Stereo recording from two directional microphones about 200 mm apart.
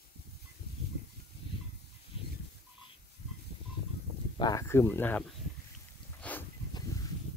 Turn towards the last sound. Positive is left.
turn(degrees=10)  # may be behind; listen again after turning